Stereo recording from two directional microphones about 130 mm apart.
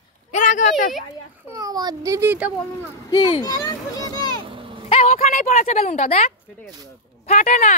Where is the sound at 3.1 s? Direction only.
35° left (ahead or behind).